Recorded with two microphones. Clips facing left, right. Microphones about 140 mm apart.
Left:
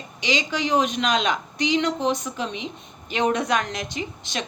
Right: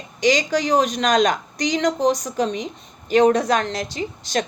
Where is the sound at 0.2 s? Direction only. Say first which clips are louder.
Right 6 dB; 45° right (ahead or behind).